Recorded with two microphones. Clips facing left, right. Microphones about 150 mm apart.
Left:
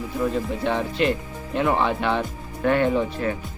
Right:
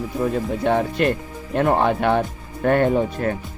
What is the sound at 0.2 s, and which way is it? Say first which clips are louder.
Speech: right 2 dB; 50° right (ahead or behind).